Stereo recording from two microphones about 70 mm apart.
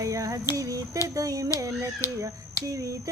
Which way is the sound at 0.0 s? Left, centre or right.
Right.